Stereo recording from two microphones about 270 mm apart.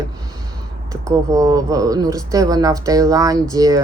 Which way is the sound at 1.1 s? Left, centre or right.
Centre.